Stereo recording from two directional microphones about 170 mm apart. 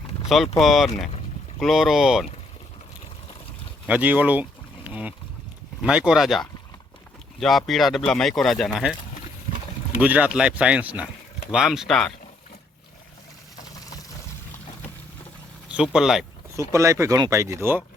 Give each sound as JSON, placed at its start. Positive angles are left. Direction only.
{"t": 0.3, "sound": "speech", "side_deg": 0}
{"t": 3.8, "sound": "speech", "side_deg": -10}
{"t": 10.0, "sound": "speech", "side_deg": -10}
{"t": 15.7, "sound": "speech", "side_deg": -5}
{"t": 16.6, "sound": "speech", "side_deg": -15}